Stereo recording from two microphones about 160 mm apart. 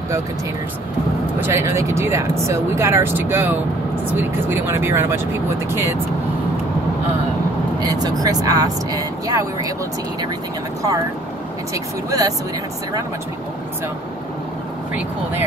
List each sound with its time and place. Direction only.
1.5 s speech: 20° right (ahead or behind)
7.8 s speech: 25° right (ahead or behind)
11.7 s speech: 20° right (ahead or behind)